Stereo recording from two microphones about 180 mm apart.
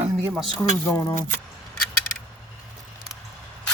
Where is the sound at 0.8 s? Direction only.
20° left (ahead or behind).